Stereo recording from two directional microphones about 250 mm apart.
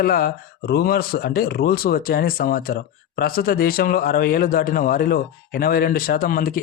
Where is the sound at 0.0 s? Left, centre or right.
Left.